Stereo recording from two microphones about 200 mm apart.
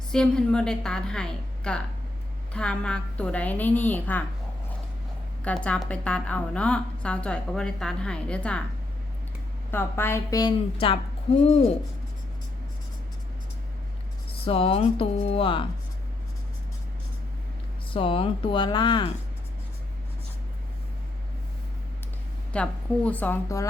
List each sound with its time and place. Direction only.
0.1 s a woman's voice: 5° left (ahead or behind)
5.5 s a woman's voice: 5° left (ahead or behind)
9.7 s a woman's voice: 10° left (ahead or behind)
14.4 s speech: 30° left (ahead or behind)
17.9 s speech: 25° left (ahead or behind)
22.5 s a woman's voice: 5° left (ahead or behind)